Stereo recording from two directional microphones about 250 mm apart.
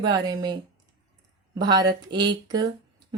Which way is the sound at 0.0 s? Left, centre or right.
Centre.